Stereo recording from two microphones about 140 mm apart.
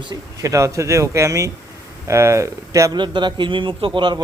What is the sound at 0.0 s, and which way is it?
Speech, 35° right (ahead or behind).